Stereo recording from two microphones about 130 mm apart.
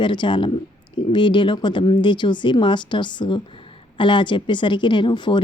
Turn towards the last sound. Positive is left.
turn(degrees=35)  # may be behind; listen again after turning